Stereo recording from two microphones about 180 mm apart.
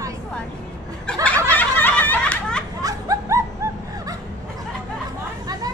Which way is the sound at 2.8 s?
20° right (ahead or behind).